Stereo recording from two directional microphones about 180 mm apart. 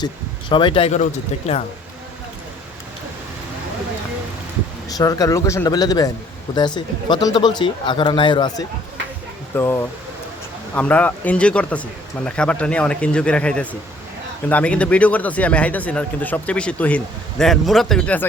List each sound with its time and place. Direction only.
0.0 s speech: 25° left (ahead or behind)
4.9 s speech: 20° left (ahead or behind)